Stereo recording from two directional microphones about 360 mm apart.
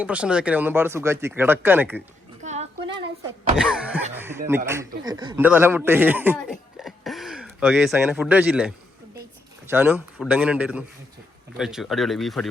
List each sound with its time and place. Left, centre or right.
0.0 s speech: centre
2.4 s a sound: centre
3.6 s a man's voice: centre